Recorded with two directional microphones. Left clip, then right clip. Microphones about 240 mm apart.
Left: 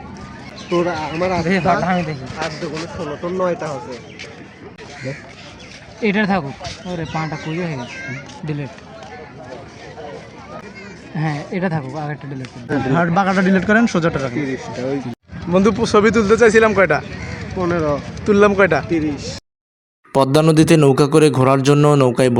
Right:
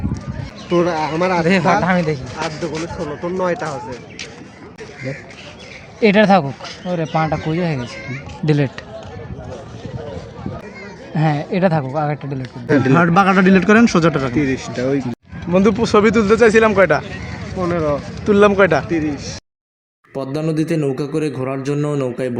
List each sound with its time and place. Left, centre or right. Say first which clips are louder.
0.7 s speech: right 3 dB; right
2.4 s speech: left 3 dB; centre
6.0 s speech: right 6 dB; right
8.4 s speech: right 11 dB; right
11.2 s speech: right 6 dB; right
12.9 s a man's voice: right 2 dB; centre
14.5 s speech: right 3 dB; right
15.5 s speech: even; centre
17.6 s speech: even; centre
18.9 s speech: even; centre
20.1 s a man's voice: left 8 dB; left